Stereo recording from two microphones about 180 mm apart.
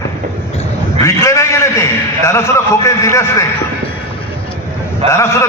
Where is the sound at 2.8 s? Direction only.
15° left (ahead or behind).